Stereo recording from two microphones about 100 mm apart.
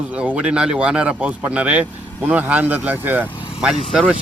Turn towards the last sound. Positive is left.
turn(degrees=-5)  # may be behind; listen again after turning